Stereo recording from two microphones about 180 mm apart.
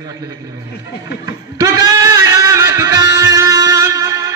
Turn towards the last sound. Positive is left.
turn(degrees=-20)  # may be behind; listen again after turning